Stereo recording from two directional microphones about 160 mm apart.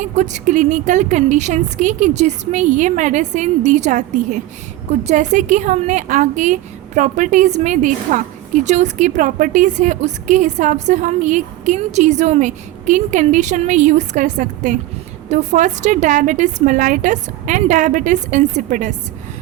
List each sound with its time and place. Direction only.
0.0 s a woman's voice: 50° right (ahead or behind)